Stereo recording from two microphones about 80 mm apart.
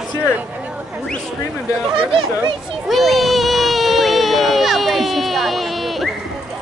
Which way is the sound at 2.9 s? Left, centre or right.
Centre.